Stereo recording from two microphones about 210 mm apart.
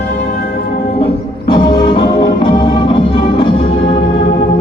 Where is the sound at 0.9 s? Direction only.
25° left (ahead or behind).